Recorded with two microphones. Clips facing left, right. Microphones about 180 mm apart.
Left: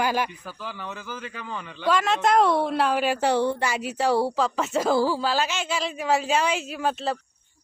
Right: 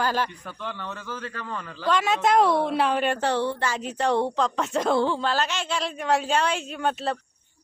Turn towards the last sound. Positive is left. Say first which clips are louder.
# even
turn(degrees=5)  # may be behind; listen again after turning